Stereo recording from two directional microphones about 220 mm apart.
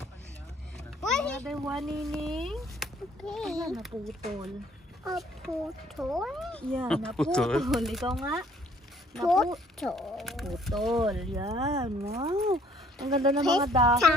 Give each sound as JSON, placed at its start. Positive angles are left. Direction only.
{"t": 1.0, "sound": "a sound", "side_deg": 5}
{"t": 1.5, "sound": "speech", "side_deg": 0}
{"t": 11.3, "sound": "speech", "side_deg": -20}
{"t": 12.9, "sound": "speech", "side_deg": 0}
{"t": 13.6, "sound": "speech", "side_deg": -30}